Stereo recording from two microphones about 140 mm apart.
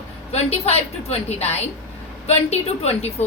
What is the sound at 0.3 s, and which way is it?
A woman's voice, 50° left (ahead or behind).